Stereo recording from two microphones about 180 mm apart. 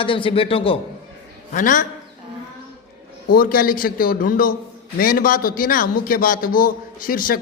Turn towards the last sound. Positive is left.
turn(degrees=50)  # may be behind; listen again after turning